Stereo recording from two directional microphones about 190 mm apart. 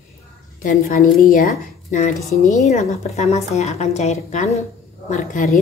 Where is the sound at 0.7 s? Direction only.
45° left (ahead or behind).